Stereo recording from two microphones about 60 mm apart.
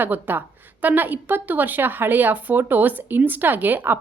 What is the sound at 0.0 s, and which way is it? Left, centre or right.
A woman's voice, right.